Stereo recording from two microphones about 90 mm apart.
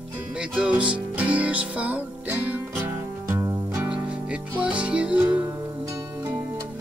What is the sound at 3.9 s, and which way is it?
Music, 10° right (ahead or behind).